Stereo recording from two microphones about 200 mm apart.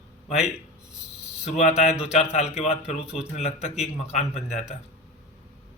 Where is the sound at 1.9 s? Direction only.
5° right (ahead or behind).